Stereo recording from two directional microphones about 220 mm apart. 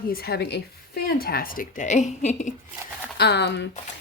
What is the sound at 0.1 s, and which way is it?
A woman's voice, 45° left (ahead or behind).